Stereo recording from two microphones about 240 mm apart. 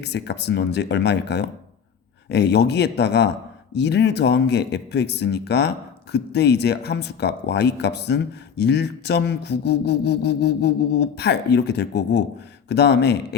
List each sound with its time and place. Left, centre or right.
0.0 s speech: left